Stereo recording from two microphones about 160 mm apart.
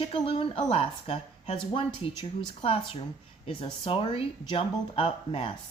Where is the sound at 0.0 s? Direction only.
35° left (ahead or behind).